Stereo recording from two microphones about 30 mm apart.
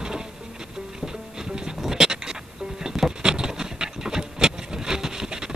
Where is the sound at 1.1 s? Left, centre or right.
Right.